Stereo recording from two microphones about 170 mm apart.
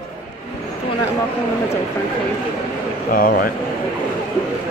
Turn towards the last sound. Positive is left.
turn(degrees=55)  # may be behind; listen again after turning